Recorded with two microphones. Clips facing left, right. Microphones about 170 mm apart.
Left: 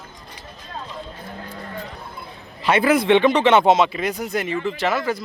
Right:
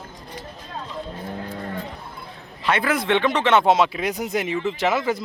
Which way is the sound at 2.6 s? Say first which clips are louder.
Left 4 dB; 5° left (ahead or behind).